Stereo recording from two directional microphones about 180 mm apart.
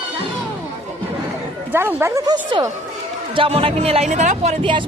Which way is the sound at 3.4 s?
30° right (ahead or behind).